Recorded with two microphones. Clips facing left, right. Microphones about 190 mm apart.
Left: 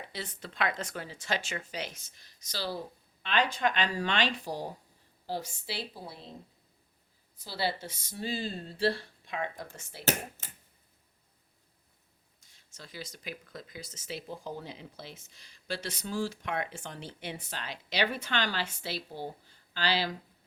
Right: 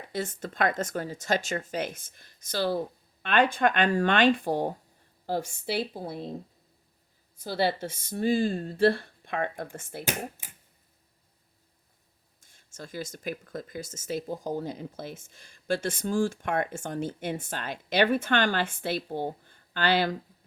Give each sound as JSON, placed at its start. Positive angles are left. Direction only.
{"t": 0.1, "sound": "speech", "side_deg": -50}
{"t": 7.3, "sound": "speech", "side_deg": -50}
{"t": 12.4, "sound": "speech", "side_deg": -50}